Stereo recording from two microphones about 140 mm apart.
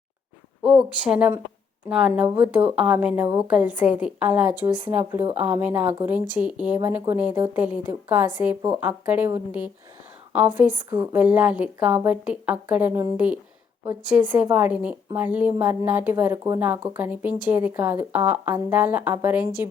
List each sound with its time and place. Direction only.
0.6 s a woman's voice: 5° right (ahead or behind)
5.2 s speech: 45° right (ahead or behind)
5.5 s speech: 10° right (ahead or behind)